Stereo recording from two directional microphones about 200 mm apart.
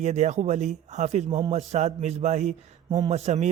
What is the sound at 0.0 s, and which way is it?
Speech, 35° right (ahead or behind).